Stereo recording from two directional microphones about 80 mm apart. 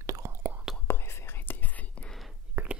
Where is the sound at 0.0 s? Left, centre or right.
Right.